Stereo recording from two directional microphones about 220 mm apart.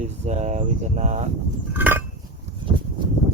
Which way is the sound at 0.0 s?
30° right (ahead or behind).